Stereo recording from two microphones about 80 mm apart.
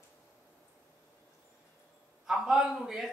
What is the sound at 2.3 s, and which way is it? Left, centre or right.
Speech, centre.